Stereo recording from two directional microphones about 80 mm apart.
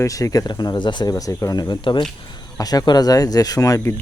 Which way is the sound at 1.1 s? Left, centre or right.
Left.